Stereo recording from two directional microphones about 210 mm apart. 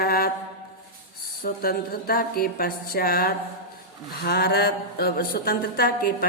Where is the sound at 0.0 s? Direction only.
45° left (ahead or behind).